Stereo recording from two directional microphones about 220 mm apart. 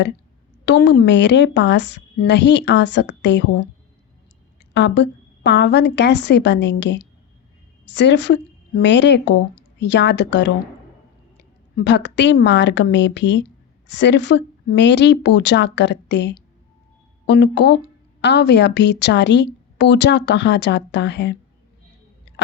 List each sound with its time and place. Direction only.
0.6 s speech: 50° left (ahead or behind)
4.7 s speech: 50° left (ahead or behind)
11.8 s speech: 50° left (ahead or behind)